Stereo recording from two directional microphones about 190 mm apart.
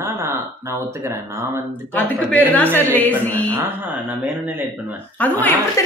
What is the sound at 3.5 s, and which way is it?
Speech, 10° right (ahead or behind).